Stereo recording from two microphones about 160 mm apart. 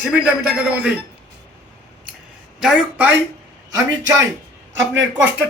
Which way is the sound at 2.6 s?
5° right (ahead or behind).